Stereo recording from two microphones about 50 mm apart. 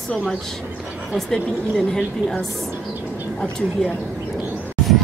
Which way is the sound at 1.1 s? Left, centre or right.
Centre.